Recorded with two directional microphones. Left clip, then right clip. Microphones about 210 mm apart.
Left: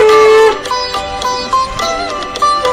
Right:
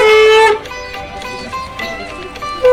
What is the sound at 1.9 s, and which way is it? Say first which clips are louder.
Music: left 8 dB; 55° left (ahead or behind).